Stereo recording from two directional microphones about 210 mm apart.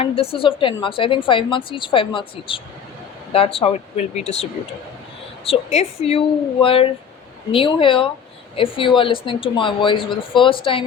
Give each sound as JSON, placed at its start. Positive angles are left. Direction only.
{"t": 0.0, "sound": "a woman's voice", "side_deg": 25}
{"t": 5.5, "sound": "a woman's voice", "side_deg": 30}